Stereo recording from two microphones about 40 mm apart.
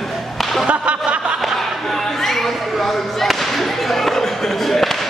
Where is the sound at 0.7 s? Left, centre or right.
Right.